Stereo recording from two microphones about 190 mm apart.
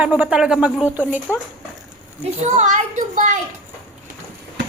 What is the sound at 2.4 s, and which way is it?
Speech, 40° right (ahead or behind).